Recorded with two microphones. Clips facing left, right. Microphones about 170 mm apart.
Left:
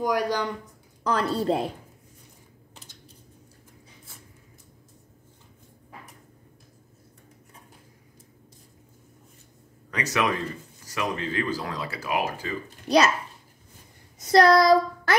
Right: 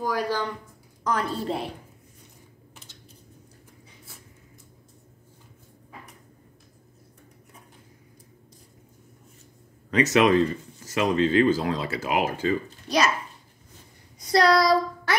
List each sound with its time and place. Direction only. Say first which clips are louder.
0.0 s speech: left 2 dB; 15° left (ahead or behind)
1.0 s a woman's voice: left 3 dB; 35° left (ahead or behind)
9.8 s speech: right 7 dB; 20° right (ahead or behind)
14.2 s a sound: left 3 dB; 50° left (ahead or behind)